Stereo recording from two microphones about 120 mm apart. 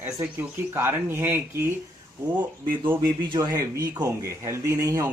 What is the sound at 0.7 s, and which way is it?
Speech, 20° right (ahead or behind).